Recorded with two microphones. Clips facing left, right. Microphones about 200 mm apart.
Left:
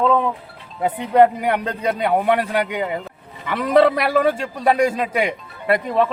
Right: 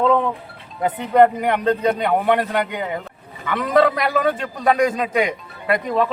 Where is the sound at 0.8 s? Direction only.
10° left (ahead or behind).